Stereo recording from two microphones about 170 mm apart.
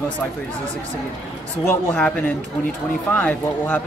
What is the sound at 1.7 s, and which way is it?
Speech, 15° left (ahead or behind).